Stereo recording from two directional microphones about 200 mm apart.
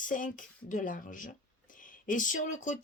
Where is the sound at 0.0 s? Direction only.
40° left (ahead or behind).